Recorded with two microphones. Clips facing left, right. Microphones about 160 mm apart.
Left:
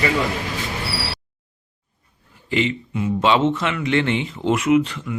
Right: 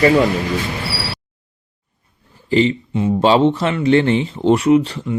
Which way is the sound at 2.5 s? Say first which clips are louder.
Right 6 dB; 35° right (ahead or behind).